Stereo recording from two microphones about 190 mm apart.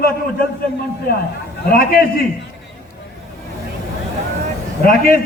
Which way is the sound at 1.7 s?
50° left (ahead or behind).